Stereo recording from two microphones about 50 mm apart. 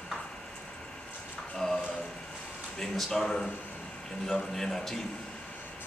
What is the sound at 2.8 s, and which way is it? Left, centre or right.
Speech, centre.